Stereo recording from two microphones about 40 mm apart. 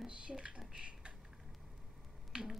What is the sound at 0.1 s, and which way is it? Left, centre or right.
Speech, right.